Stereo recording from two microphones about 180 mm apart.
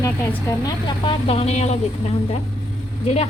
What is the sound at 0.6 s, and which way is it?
A woman's voice, 25° left (ahead or behind).